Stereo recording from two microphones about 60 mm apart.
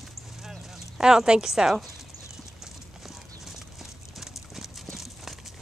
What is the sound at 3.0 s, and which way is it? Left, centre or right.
Clip-clop, centre.